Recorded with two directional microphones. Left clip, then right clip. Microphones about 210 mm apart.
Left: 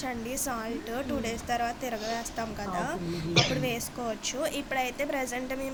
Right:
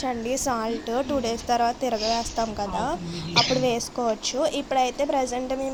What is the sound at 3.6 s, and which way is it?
Speech, 25° right (ahead or behind).